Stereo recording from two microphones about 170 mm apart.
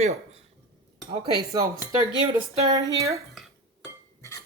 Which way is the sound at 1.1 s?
25° right (ahead or behind).